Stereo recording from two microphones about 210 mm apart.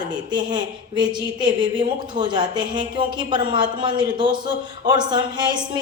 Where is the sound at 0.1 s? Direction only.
20° right (ahead or behind).